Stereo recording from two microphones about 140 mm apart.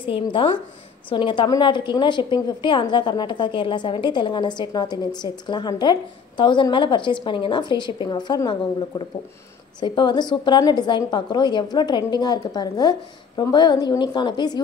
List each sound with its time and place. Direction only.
0.0 s a woman's voice: 35° left (ahead or behind)